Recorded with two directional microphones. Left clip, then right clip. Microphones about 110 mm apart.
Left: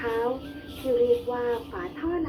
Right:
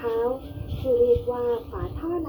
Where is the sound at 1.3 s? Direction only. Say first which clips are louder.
Right 2 dB; 10° left (ahead or behind).